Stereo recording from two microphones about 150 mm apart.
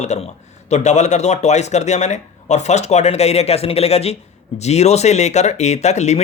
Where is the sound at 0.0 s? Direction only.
50° left (ahead or behind).